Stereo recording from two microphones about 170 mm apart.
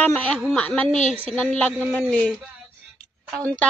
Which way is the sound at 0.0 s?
5° left (ahead or behind).